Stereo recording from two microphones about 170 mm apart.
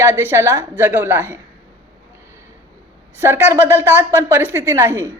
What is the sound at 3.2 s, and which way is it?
Speech, 15° right (ahead or behind).